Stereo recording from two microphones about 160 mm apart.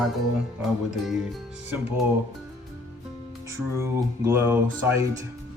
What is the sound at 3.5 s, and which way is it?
Speech, 15° right (ahead or behind).